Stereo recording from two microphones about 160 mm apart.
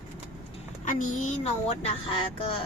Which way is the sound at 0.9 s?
55° left (ahead or behind).